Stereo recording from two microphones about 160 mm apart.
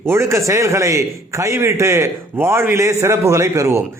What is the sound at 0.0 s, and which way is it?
A man's voice, 15° right (ahead or behind).